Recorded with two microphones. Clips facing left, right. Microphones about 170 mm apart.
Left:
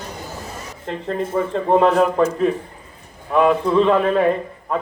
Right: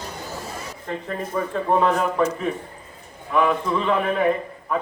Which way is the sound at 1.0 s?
25° left (ahead or behind).